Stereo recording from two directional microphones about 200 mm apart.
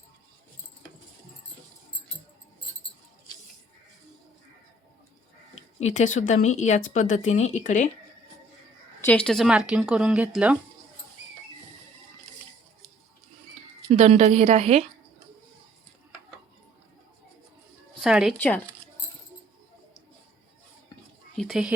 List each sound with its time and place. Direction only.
5.5 s speech: 35° left (ahead or behind)
9.0 s speech: 10° left (ahead or behind)
13.8 s a woman's voice: 30° right (ahead or behind)
18.0 s speech: centre (ahead or behind)
21.3 s speech: centre (ahead or behind)